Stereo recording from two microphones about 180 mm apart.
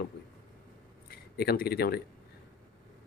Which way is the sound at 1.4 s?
65° left (ahead or behind).